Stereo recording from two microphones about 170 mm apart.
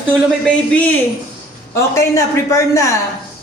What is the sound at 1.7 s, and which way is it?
Speech, 15° left (ahead or behind).